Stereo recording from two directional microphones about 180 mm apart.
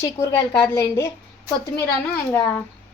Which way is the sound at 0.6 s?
15° left (ahead or behind).